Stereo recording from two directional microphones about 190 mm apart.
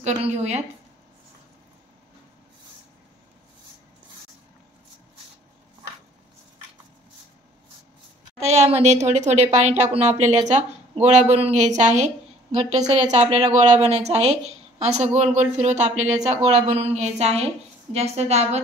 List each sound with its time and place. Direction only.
0.0 s speech: 35° right (ahead or behind)
8.4 s speech: 35° right (ahead or behind)